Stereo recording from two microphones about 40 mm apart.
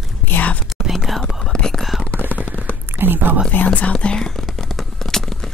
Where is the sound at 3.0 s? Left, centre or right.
Right.